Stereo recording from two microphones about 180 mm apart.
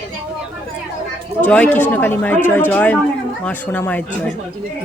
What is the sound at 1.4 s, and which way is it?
Speech, 10° left (ahead or behind).